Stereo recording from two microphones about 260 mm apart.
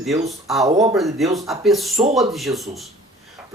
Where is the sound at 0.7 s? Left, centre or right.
Right.